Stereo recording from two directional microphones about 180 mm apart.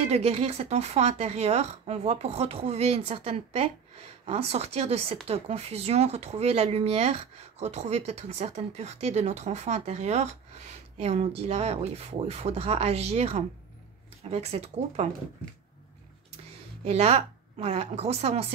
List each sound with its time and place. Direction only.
0.0 s speech: 35° right (ahead or behind)
16.8 s speech: 35° right (ahead or behind)